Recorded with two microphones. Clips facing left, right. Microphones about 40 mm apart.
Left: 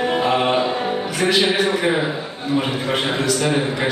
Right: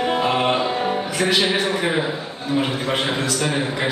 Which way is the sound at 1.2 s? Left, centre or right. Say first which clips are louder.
Left 2 dB; centre.